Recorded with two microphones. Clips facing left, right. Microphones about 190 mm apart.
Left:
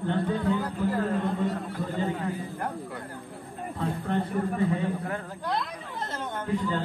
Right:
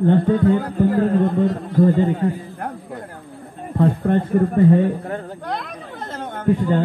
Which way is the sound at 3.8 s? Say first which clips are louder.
Right 11 dB; 60° right (ahead or behind).